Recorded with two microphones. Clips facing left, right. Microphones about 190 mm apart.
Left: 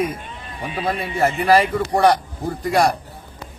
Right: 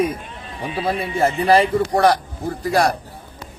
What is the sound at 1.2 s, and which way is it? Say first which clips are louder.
Speech: right 1 dB; 30° right (ahead or behind).